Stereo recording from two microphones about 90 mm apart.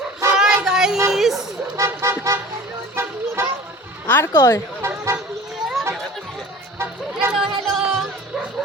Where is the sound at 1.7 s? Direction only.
30° right (ahead or behind).